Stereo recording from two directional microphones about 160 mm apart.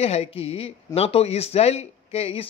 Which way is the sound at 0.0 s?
40° left (ahead or behind).